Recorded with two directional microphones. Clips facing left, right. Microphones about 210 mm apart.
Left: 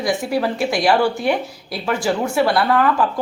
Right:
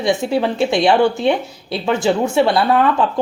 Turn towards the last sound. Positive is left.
turn(degrees=-25)  # may be behind; listen again after turning